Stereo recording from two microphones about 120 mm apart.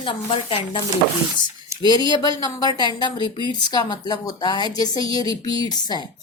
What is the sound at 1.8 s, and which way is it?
A woman's voice, 35° left (ahead or behind).